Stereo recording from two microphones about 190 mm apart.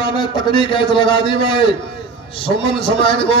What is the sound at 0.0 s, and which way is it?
A man's voice, 25° left (ahead or behind).